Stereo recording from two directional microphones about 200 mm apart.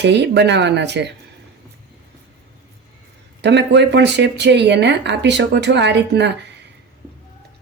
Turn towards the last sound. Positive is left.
turn(degrees=-60)  # may be behind; listen again after turning